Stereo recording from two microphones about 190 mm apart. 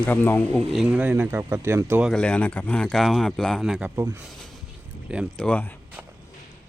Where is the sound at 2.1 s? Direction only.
5° left (ahead or behind); by 4.2 s 15° right (ahead or behind).